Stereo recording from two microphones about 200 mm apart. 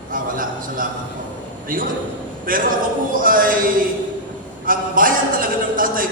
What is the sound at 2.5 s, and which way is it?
A man's voice, 45° right (ahead or behind).